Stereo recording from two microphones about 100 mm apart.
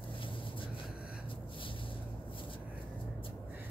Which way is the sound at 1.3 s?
60° left (ahead or behind).